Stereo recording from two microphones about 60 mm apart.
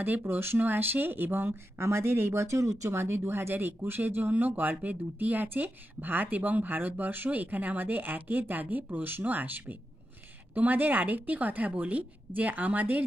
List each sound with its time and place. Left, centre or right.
0.0 s a woman's voice: right